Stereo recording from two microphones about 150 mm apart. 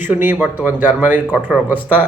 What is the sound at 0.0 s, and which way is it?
A man's voice, 15° right (ahead or behind).